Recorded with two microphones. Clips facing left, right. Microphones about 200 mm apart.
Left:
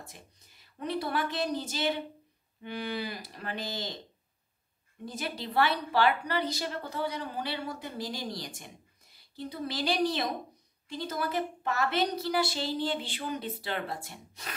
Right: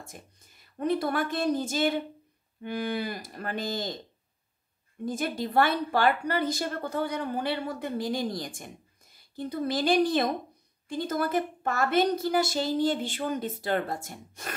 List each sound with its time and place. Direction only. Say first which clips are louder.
0.7 s speech: right 5 dB; 50° right (ahead or behind)
5.0 s speech: right 7 dB; 50° right (ahead or behind)